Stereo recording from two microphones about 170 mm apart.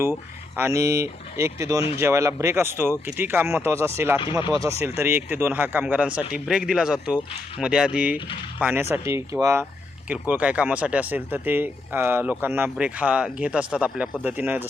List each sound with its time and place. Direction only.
0.0 s speech: 15° right (ahead or behind)